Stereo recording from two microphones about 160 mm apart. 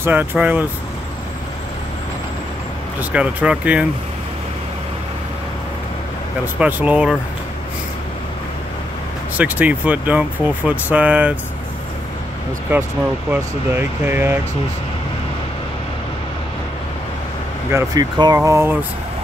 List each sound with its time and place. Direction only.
0.0 s speech: 10° right (ahead or behind)
3.0 s speech: 10° right (ahead or behind)
6.4 s speech: 10° right (ahead or behind)
9.4 s speech: 10° right (ahead or behind)
12.7 s speech: 10° right (ahead or behind)
17.6 s speech: 15° right (ahead or behind)